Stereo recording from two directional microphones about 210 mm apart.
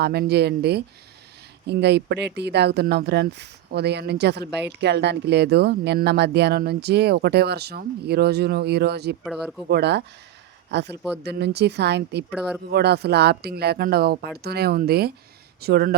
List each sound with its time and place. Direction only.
0.0 s speech: 50° right (ahead or behind)
9.2 s speech: centre (ahead or behind)
9.6 s speech: 50° right (ahead or behind)
12.3 s speech: 5° right (ahead or behind)
12.7 s speech: 50° right (ahead or behind)